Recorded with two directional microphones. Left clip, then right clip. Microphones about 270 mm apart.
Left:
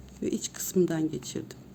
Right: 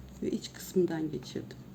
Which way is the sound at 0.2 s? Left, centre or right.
Left.